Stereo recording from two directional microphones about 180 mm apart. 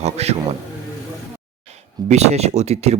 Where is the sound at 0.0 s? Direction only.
35° right (ahead or behind).